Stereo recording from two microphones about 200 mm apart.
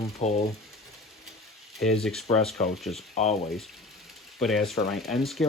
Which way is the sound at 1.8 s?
Centre (ahead or behind).